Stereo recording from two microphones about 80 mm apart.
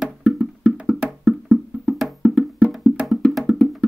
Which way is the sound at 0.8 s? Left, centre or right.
Centre.